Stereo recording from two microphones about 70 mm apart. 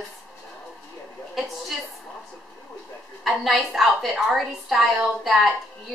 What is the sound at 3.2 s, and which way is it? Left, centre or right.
A woman's voice, centre.